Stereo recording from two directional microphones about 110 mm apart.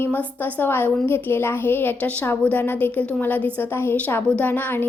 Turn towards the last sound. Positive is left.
turn(degrees=20)  # may be behind; listen again after turning